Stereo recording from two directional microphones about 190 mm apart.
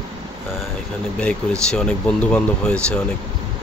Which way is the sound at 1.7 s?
5° left (ahead or behind).